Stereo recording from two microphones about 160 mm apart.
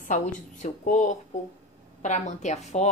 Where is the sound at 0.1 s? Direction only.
50° left (ahead or behind).